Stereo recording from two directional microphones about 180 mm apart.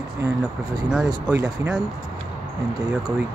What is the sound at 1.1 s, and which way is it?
Speech, 20° right (ahead or behind).